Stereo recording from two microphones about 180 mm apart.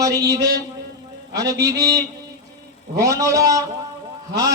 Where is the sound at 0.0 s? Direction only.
20° right (ahead or behind).